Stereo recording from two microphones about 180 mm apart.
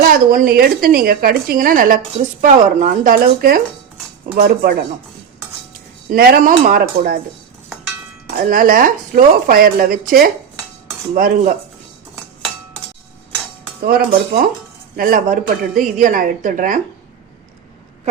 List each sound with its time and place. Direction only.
0.0 s a woman's voice: 50° right (ahead or behind)
6.1 s a woman's voice: 60° right (ahead or behind)
8.4 s speech: 50° right (ahead or behind)
13.8 s speech: 50° right (ahead or behind)